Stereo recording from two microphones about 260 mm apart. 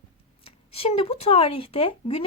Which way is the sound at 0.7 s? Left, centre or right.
Left.